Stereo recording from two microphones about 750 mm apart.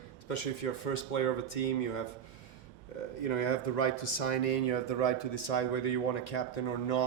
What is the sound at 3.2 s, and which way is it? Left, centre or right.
Speech, left.